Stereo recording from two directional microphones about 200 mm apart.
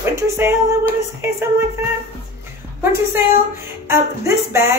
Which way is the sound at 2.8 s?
10° right (ahead or behind).